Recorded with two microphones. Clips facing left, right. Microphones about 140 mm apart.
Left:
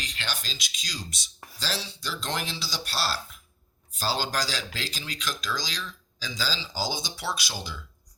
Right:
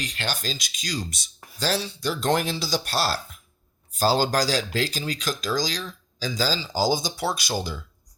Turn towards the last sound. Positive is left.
turn(degrees=-45)  # may be behind; listen again after turning